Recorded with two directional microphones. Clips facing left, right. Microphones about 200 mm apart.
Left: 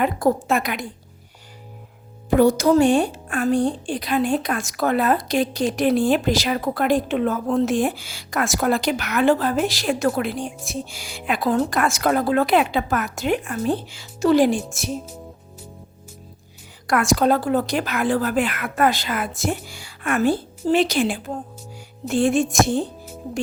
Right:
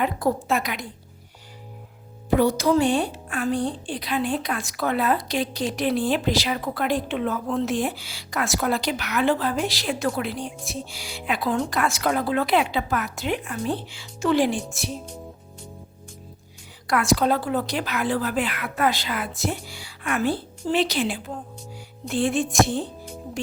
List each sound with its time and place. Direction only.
0.0 s a woman's voice: 50° left (ahead or behind)
2.3 s a woman's voice: 45° left (ahead or behind)
16.8 s a woman's voice: 50° left (ahead or behind)